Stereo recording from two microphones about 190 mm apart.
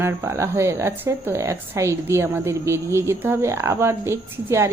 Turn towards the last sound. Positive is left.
turn(degrees=-15)  # may be behind; listen again after turning